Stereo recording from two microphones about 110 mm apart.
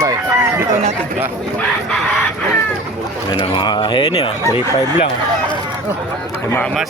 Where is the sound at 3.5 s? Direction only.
45° left (ahead or behind).